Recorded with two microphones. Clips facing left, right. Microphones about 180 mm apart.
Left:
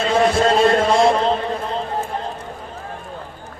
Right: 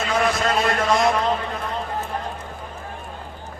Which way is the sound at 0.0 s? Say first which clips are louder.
Left 6 dB; 30° left (ahead or behind).